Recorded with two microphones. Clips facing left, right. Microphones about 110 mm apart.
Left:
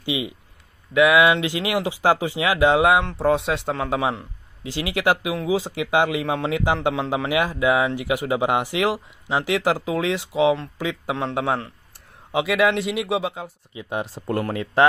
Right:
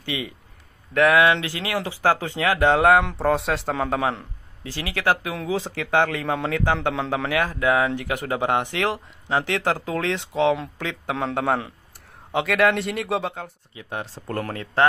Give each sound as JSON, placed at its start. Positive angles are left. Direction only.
{"t": 0.0, "sound": "a man's voice", "side_deg": 15}
{"t": 4.6, "sound": "a man's voice", "side_deg": 15}
{"t": 13.7, "sound": "speech", "side_deg": 15}